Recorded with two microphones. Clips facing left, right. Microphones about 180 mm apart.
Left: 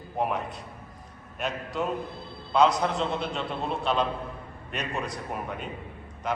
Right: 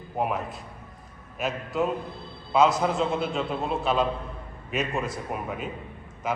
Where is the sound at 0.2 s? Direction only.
Centre (ahead or behind).